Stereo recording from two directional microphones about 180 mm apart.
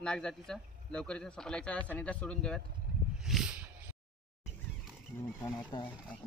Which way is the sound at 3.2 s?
Centre (ahead or behind).